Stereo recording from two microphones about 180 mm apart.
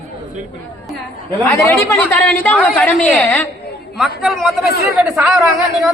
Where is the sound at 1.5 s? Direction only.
15° left (ahead or behind).